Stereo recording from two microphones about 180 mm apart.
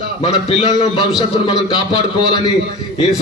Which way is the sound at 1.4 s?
25° left (ahead or behind).